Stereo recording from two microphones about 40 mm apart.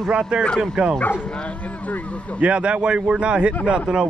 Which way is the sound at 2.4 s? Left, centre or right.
Right.